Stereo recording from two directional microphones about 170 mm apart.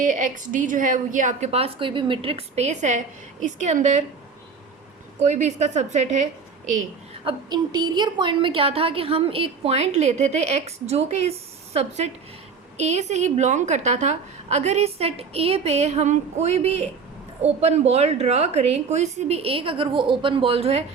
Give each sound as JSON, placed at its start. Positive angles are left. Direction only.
{"t": 0.0, "sound": "a woman's voice", "side_deg": -50}
{"t": 5.2, "sound": "a woman's voice", "side_deg": -45}
{"t": 7.3, "sound": "a woman's voice", "side_deg": -25}